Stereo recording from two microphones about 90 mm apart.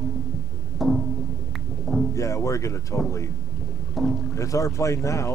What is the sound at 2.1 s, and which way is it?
Speech, 35° left (ahead or behind).